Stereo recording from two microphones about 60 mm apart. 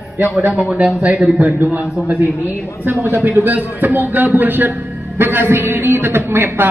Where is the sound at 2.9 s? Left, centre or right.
Right.